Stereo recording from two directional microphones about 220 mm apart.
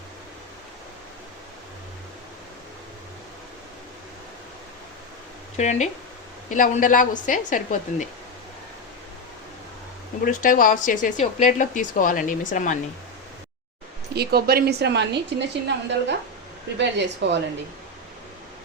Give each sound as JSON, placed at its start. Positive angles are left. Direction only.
{"t": 5.5, "sound": "speech", "side_deg": 30}
{"t": 10.2, "sound": "speech", "side_deg": 40}
{"t": 14.1, "sound": "a woman's voice", "side_deg": -45}